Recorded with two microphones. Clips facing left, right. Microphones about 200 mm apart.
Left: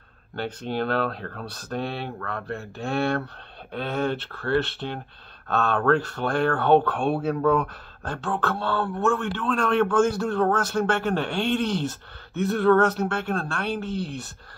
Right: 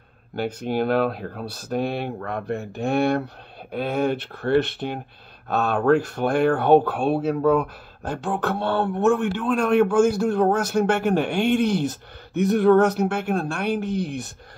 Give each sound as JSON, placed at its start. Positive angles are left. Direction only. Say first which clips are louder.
{"t": 0.4, "sound": "speech", "louder": "right 4 dB", "side_deg": -10}